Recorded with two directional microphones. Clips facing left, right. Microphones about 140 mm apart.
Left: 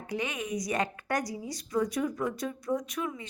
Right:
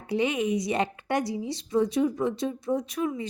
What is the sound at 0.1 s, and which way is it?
Speech, 30° right (ahead or behind).